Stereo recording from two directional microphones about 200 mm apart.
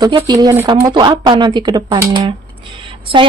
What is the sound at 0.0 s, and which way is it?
A woman's voice, 20° right (ahead or behind).